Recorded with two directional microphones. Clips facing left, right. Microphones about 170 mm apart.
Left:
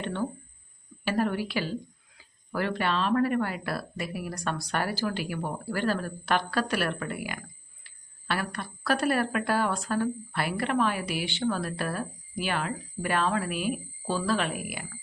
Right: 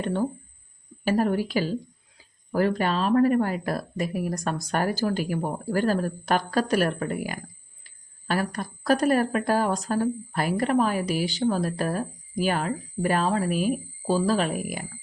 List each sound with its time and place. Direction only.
0.0 s a woman's voice: 40° right (ahead or behind)